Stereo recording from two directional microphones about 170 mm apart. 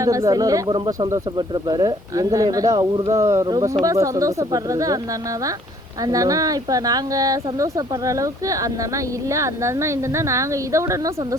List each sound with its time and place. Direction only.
0.0 s speech: 20° right (ahead or behind)
6.1 s a woman's voice: 20° right (ahead or behind)